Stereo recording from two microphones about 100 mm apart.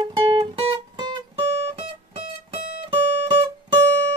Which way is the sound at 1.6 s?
75° right (ahead or behind).